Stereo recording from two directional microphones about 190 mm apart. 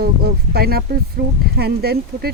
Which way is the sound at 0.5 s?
55° right (ahead or behind).